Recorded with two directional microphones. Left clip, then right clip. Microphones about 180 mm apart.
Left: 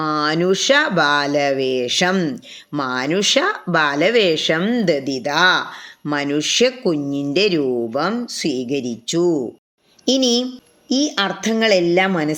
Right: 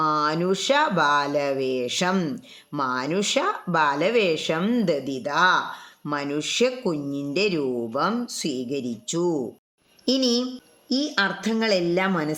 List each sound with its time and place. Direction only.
0.0 s a woman's voice: 10° left (ahead or behind)